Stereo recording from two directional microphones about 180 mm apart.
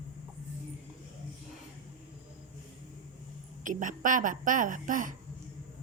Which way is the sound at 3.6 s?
45° right (ahead or behind).